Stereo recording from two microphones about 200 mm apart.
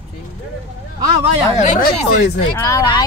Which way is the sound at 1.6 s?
35° left (ahead or behind).